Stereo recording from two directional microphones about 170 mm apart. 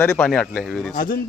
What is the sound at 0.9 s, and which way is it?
Speech, 55° left (ahead or behind).